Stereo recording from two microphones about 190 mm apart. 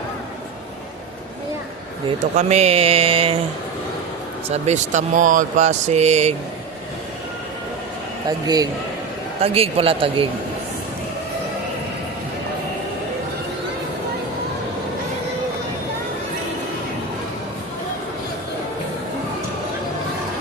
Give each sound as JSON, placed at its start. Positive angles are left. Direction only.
{"t": 2.0, "sound": "speech", "side_deg": -35}
{"t": 4.4, "sound": "speech", "side_deg": -35}
{"t": 8.4, "sound": "speech", "side_deg": -20}
{"t": 9.4, "sound": "speech", "side_deg": -30}